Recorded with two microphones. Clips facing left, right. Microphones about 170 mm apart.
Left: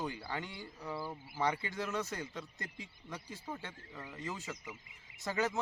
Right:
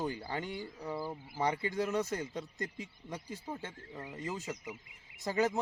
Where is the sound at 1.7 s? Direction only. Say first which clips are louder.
Right 5 dB; 40° right (ahead or behind).